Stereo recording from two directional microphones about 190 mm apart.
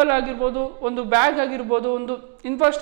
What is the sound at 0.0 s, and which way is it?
A woman's voice, 15° right (ahead or behind).